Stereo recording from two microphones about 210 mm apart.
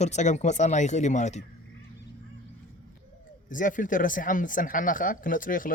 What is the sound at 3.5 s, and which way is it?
Speech, 40° left (ahead or behind).